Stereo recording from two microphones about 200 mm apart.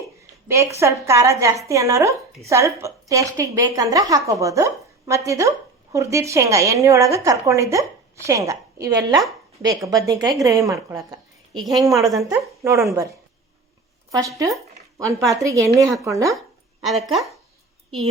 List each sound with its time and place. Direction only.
0.4 s a woman's voice: 15° right (ahead or behind)
11.6 s speech: centre (ahead or behind)
12.0 s a woman's voice: 15° right (ahead or behind)
14.1 s a woman's voice: 15° right (ahead or behind)
16.8 s speech: centre (ahead or behind)